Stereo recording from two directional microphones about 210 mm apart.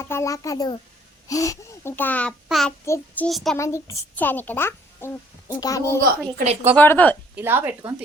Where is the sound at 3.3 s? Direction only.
Centre (ahead or behind).